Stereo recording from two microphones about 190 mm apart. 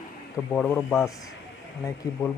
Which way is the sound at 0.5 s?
5° left (ahead or behind).